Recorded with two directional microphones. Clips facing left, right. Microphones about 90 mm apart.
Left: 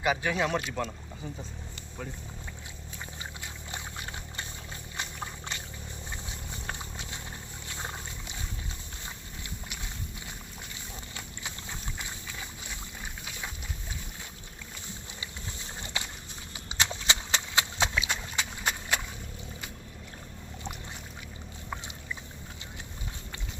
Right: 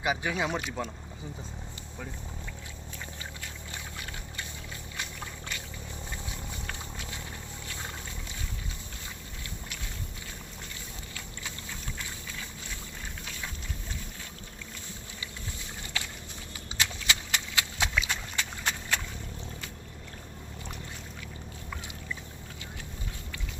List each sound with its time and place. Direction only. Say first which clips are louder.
0.0 s speech: left 2 dB; 15° right (ahead or behind)
3.4 s boat: left 1 dB; 25° left (ahead or behind)
4.9 s a sound: left 3 dB; 25° left (ahead or behind)
6.2 s vehicle: even; 25° left (ahead or behind)
11.9 s boat: even; 20° left (ahead or behind)
15.8 s a sound: left 1 dB; 25° left (ahead or behind)
16.6 s horse: left 1 dB; 25° left (ahead or behind)